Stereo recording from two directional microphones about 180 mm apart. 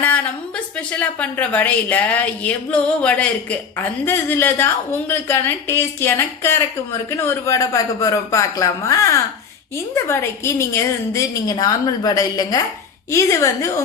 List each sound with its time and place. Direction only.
0.0 s a woman's voice: 10° left (ahead or behind)